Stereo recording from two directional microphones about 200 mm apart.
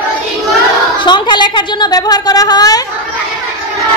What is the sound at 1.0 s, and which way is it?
A woman's voice, 25° left (ahead or behind).